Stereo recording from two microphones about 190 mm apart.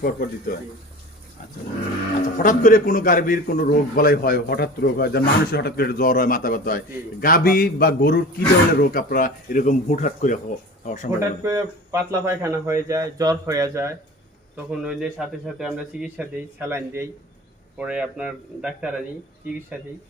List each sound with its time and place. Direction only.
0.0 s a man's voice: 50° left (ahead or behind)
2.4 s a man's voice: 45° left (ahead or behind)
11.2 s speech: 15° right (ahead or behind)
14.5 s a man's voice: 5° right (ahead or behind)